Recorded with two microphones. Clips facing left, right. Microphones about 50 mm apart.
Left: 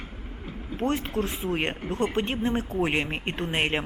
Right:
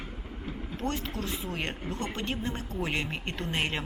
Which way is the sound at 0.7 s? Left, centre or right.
Left.